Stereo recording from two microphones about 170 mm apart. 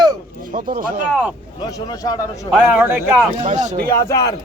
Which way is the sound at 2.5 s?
10° right (ahead or behind).